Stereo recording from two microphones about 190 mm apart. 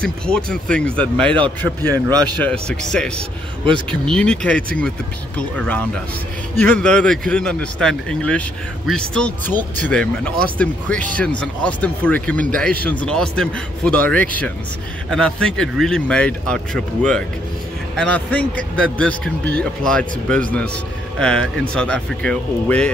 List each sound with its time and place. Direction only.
0.0 s speech: 5° left (ahead or behind)
1.3 s a man's voice: 25° right (ahead or behind)
2.3 s speech: 5° left (ahead or behind)